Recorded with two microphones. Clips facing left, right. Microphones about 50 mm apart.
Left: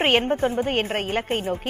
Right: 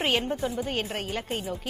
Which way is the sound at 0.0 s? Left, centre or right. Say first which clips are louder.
Left 7 dB; left.